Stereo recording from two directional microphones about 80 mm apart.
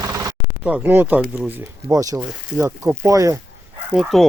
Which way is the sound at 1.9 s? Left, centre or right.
Right.